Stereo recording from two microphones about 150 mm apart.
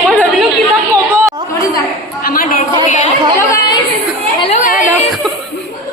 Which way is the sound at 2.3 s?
65° left (ahead or behind).